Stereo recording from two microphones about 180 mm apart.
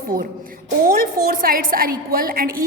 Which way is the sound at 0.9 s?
50° right (ahead or behind).